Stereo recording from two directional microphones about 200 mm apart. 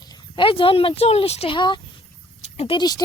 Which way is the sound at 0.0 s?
20° left (ahead or behind).